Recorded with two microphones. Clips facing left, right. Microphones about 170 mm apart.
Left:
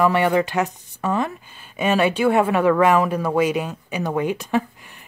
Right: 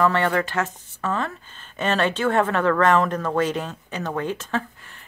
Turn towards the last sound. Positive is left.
turn(degrees=15)  # may be behind; listen again after turning